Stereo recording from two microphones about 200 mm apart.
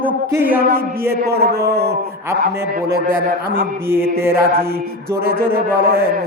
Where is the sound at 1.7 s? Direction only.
50° right (ahead or behind).